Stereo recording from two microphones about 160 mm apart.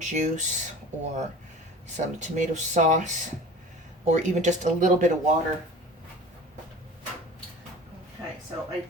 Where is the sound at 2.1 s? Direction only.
50° right (ahead or behind).